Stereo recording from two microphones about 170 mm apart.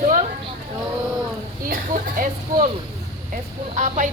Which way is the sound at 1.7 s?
50° right (ahead or behind).